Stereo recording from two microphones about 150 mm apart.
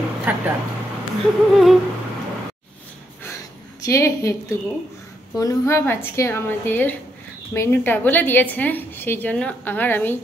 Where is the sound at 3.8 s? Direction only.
20° left (ahead or behind).